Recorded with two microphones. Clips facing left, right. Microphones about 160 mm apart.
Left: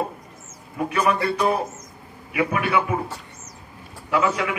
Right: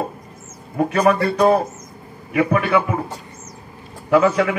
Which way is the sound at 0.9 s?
40° right (ahead or behind).